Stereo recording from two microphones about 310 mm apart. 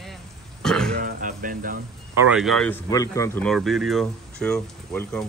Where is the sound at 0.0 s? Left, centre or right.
Centre.